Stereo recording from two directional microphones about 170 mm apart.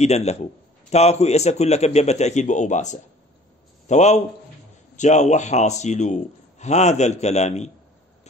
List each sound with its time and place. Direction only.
0.0 s a man's voice: 40° left (ahead or behind)